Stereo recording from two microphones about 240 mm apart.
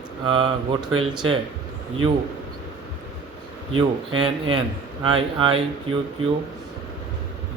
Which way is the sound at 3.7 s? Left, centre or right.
Right.